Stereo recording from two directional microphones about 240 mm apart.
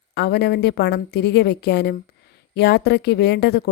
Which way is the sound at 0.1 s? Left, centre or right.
Left.